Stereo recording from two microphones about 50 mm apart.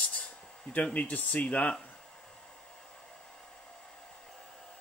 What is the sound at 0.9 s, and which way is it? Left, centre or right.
Speech, left.